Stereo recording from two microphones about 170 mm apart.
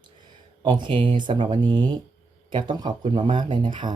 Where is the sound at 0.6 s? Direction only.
25° right (ahead or behind).